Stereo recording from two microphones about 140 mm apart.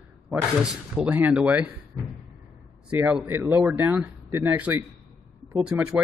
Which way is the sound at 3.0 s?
10° right (ahead or behind).